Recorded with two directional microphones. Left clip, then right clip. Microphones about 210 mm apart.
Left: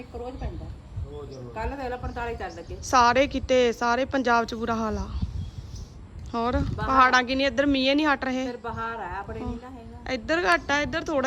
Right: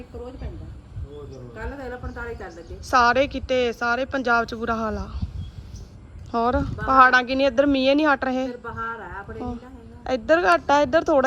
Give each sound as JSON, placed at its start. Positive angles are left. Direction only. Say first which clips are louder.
{"t": 1.5, "sound": "a woman's voice", "louder": "left 3 dB", "side_deg": 20}
{"t": 6.3, "sound": "speech", "louder": "right 5 dB", "side_deg": 5}